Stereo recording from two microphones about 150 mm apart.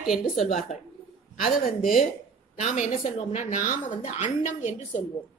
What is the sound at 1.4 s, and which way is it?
Speech, 70° left (ahead or behind).